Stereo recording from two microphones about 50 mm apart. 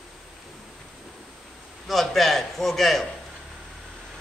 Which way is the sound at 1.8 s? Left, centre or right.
Centre.